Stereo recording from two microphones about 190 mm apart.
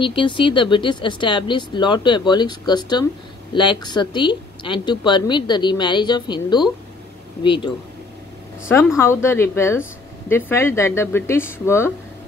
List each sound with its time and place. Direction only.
0.0 s speech: 25° left (ahead or behind)
8.9 s speech: 15° left (ahead or behind)